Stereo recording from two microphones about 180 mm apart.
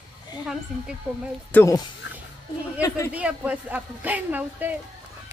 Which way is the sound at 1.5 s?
15° left (ahead or behind).